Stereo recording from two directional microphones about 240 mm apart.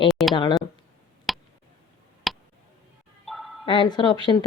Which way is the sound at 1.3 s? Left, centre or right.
Centre.